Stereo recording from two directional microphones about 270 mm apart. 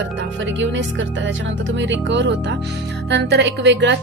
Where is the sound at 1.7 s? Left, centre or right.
Right.